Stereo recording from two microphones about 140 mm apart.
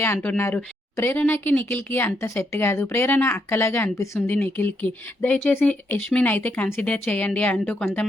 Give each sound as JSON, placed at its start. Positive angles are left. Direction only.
{"t": 0.0, "sound": "speech", "side_deg": 10}